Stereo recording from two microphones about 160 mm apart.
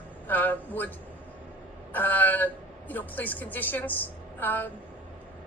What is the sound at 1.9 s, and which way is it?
A woman's voice, 10° left (ahead or behind).